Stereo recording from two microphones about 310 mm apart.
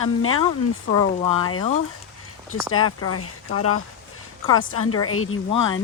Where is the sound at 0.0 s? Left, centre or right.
Left.